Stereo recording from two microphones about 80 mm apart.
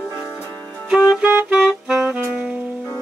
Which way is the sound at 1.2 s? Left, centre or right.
Centre.